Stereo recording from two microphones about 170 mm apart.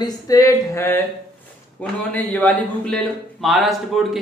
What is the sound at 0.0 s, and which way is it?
A man's voice, 20° left (ahead or behind).